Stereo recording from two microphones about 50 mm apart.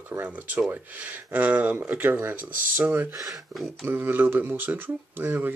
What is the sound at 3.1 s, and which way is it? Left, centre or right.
Speech, right.